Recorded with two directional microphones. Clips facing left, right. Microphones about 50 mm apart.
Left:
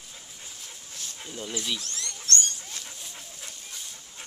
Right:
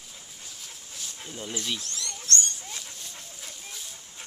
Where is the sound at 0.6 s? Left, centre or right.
Centre.